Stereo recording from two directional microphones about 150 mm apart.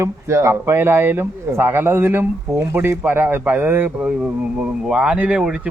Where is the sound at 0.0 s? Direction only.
20° right (ahead or behind).